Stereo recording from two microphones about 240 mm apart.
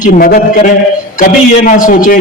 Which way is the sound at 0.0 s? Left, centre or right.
Left.